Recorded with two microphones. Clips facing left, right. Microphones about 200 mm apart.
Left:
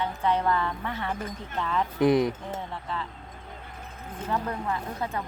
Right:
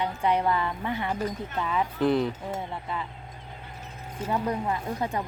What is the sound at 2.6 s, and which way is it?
Speech, 15° right (ahead or behind).